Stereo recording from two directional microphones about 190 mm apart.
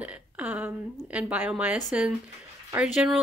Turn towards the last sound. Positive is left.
turn(degrees=-5)  # may be behind; listen again after turning